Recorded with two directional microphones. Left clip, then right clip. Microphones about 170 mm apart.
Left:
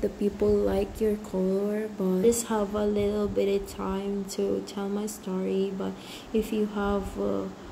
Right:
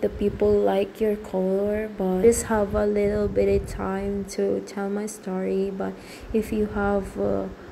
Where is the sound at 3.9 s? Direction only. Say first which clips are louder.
Right 3 dB; 45° right (ahead or behind).